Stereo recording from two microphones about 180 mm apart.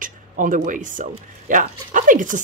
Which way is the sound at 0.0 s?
45° right (ahead or behind).